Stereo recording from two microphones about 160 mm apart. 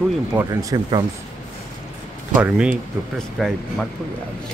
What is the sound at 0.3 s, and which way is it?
Speech, 20° right (ahead or behind).